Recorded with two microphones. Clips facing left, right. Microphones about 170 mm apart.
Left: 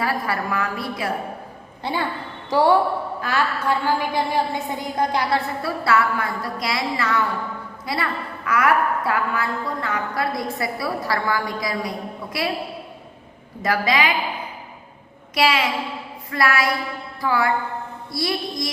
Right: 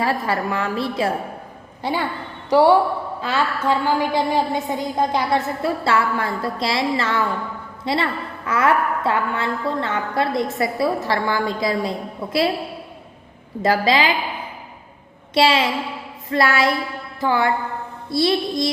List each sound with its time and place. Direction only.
0.0 s a woman's voice: 25° right (ahead or behind)
13.6 s a woman's voice: 30° right (ahead or behind)
15.4 s a woman's voice: 25° right (ahead or behind)